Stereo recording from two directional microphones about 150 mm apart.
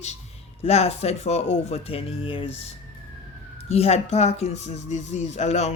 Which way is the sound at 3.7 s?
45° left (ahead or behind).